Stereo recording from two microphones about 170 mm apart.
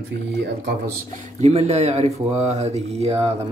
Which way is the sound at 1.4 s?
40° right (ahead or behind).